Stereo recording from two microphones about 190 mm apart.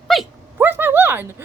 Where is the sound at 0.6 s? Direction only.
10° right (ahead or behind).